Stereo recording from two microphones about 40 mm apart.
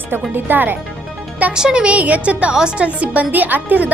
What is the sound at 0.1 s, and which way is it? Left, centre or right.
Speech, right.